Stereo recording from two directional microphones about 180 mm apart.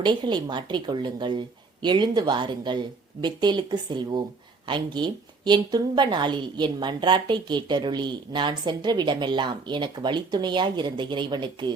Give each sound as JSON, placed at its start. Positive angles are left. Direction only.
{"t": 0.0, "sound": "a woman's voice", "side_deg": -25}